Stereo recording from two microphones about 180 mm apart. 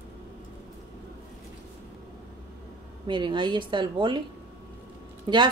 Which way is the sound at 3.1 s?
25° right (ahead or behind).